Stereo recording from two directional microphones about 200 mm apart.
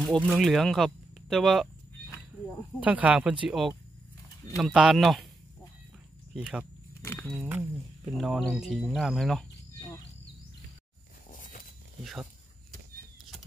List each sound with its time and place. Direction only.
0.0 s speech: centre (ahead or behind)
2.8 s speech: 5° right (ahead or behind)
6.3 s speech: 5° right (ahead or behind)
7.0 s speech: 10° left (ahead or behind)
7.4 s a sound: 10° right (ahead or behind)
8.2 s speech: centre (ahead or behind)
9.8 s a sound: 15° left (ahead or behind)
11.2 s walk: 40° left (ahead or behind)
12.0 s speech: centre (ahead or behind)